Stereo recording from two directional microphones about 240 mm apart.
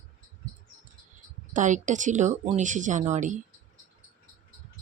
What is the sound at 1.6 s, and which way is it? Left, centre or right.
Speech, right.